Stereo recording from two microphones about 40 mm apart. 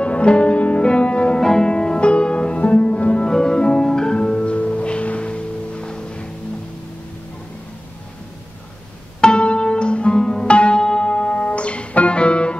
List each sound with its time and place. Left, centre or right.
0.0 s music: left
1.4 s music: centre
9.2 s music: left
10.5 s music: left